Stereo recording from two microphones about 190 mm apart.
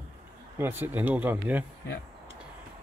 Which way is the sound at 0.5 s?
10° right (ahead or behind).